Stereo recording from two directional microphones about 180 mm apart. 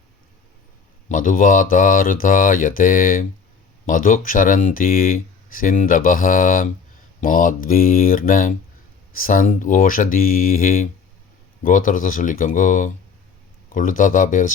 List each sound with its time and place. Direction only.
1.0 s speech: 45° left (ahead or behind)